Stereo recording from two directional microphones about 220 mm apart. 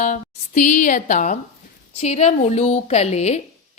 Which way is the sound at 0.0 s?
35° left (ahead or behind).